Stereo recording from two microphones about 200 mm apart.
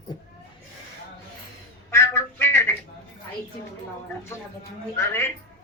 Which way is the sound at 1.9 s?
10° left (ahead or behind).